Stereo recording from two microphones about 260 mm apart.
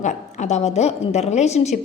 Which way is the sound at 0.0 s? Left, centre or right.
Left.